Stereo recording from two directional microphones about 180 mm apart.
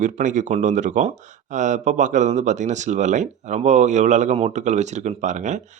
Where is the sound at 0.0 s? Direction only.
45° right (ahead or behind).